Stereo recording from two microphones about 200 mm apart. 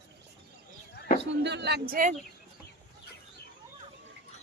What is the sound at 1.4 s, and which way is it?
Speech, 60° right (ahead or behind).